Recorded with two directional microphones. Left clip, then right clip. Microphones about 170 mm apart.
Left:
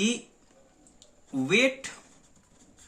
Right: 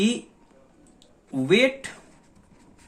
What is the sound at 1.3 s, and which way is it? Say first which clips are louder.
Speech: right 4 dB; 25° right (ahead or behind).